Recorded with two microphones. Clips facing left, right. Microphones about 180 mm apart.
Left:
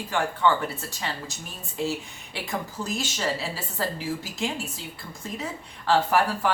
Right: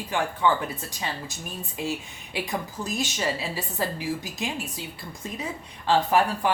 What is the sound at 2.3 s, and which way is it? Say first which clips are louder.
A woman's voice: right 2 dB; 20° right (ahead or behind).